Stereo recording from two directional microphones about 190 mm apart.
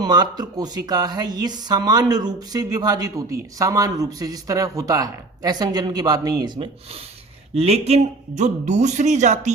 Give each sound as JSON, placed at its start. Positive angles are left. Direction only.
{"t": 0.0, "sound": "speech", "side_deg": -20}
{"t": 7.5, "sound": "speech", "side_deg": -35}